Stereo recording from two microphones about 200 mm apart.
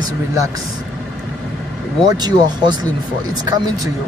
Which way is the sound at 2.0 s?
20° right (ahead or behind).